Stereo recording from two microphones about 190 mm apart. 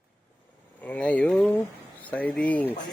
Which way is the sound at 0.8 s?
5° left (ahead or behind).